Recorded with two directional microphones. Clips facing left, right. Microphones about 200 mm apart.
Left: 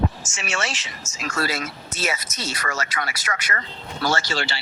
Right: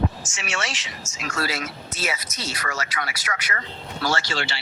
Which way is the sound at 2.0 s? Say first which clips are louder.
Left 2 dB; 45° left (ahead or behind).